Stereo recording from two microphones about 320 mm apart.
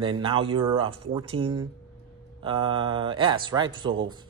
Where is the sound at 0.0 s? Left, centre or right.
Centre.